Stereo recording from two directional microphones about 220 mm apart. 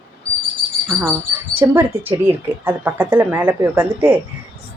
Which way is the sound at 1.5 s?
10° right (ahead or behind).